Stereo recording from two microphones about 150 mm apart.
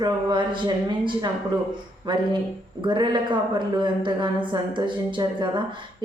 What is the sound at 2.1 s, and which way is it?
A woman's voice, 30° right (ahead or behind).